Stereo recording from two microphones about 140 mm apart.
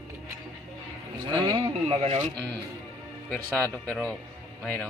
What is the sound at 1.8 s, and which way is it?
Speech, 50° right (ahead or behind).